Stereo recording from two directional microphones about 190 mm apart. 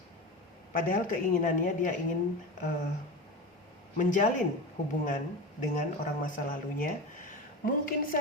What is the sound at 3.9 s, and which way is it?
Speech, 45° left (ahead or behind).